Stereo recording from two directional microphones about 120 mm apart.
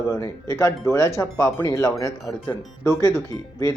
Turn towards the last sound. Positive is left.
turn(degrees=25)  # may be behind; listen again after turning